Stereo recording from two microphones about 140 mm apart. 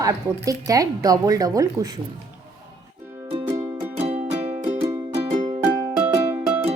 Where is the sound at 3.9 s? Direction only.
50° right (ahead or behind).